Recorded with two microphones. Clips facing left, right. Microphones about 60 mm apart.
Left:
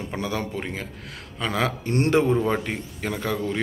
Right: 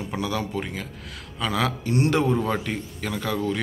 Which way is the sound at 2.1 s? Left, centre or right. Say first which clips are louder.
Left 2 dB; left.